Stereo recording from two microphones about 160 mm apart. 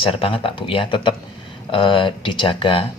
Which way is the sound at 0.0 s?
35° left (ahead or behind).